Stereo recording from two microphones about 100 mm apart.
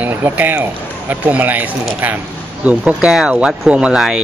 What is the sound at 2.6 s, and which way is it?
Speech, 10° right (ahead or behind).